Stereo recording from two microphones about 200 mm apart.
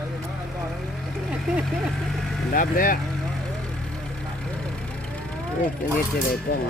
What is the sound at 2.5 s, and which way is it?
Speech, 45° left (ahead or behind).